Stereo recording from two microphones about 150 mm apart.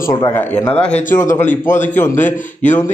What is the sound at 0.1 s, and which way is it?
Speech, 25° left (ahead or behind).